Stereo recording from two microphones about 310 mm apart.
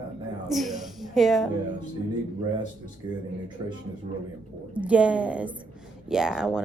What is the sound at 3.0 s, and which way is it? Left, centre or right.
Speech, centre.